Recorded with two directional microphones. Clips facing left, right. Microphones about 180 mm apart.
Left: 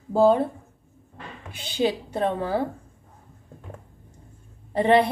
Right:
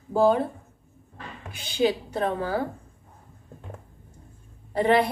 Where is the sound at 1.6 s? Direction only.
30° left (ahead or behind).